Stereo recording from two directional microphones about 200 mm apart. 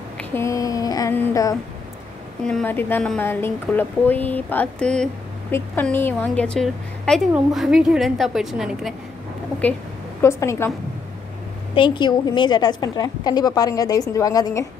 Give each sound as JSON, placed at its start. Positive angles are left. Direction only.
{"t": 0.2, "sound": "a sound", "side_deg": 10}
{"t": 2.4, "sound": "a woman's voice", "side_deg": 5}
{"t": 10.2, "sound": "a woman's voice", "side_deg": 15}
{"t": 11.7, "sound": "a woman's voice", "side_deg": 25}